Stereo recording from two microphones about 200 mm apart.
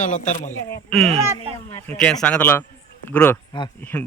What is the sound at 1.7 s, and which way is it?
Speech, 5° left (ahead or behind).